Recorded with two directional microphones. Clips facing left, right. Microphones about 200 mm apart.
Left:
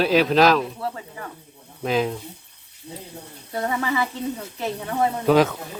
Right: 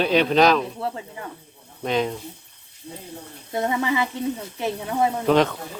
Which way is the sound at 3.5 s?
20° right (ahead or behind).